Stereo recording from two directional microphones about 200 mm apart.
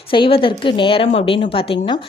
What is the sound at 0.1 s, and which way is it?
A woman's voice, 25° left (ahead or behind).